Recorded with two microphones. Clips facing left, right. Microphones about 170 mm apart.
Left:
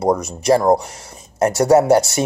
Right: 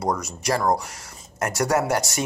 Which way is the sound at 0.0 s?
25° left (ahead or behind).